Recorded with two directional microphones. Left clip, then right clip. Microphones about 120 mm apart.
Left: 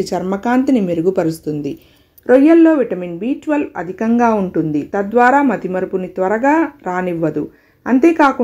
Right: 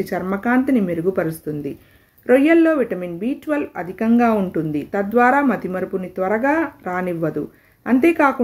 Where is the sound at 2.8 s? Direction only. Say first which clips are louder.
Left 3 dB; 15° left (ahead or behind).